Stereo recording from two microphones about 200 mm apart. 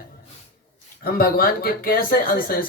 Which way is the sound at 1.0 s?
45° left (ahead or behind).